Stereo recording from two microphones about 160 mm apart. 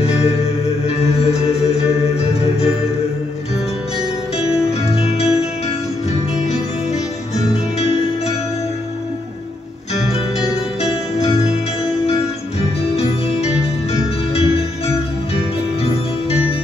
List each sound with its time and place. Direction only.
0.0 s music: 40° left (ahead or behind)
4.8 s music: 40° left (ahead or behind)
10.8 s music: 40° left (ahead or behind)
12.9 s music: 40° left (ahead or behind)
15.8 s music: 40° left (ahead or behind)